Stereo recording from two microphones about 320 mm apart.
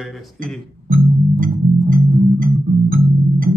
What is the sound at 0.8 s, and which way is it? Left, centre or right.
Music, right.